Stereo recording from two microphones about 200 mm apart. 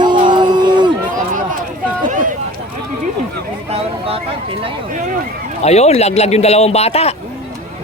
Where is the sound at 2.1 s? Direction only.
40° right (ahead or behind).